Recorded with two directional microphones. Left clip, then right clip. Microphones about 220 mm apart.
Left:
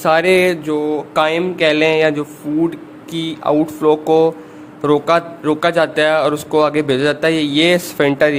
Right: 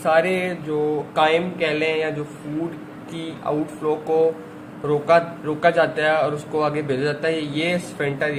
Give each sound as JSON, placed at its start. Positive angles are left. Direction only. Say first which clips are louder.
{"t": 0.0, "sound": "a man's voice", "louder": "left 7 dB", "side_deg": 45}